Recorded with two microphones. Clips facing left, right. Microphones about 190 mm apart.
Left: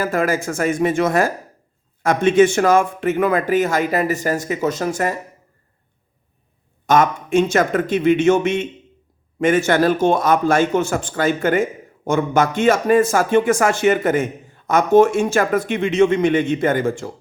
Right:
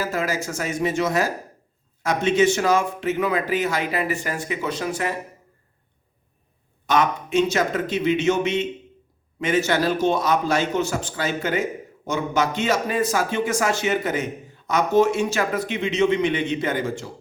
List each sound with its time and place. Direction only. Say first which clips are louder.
0.0 s a man's voice: left 6 dB; 55° left (ahead or behind)
6.8 s a man's voice: left 5 dB; 45° left (ahead or behind)